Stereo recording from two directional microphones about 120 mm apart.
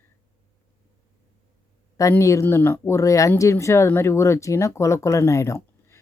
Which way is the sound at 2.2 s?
25° left (ahead or behind).